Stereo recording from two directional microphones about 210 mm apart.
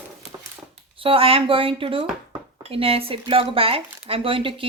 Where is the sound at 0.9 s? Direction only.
25° right (ahead or behind).